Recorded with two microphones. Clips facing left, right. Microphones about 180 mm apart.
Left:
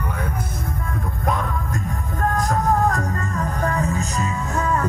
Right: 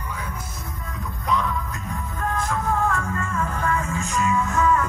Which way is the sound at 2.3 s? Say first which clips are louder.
Left 4 dB; 40° left (ahead or behind).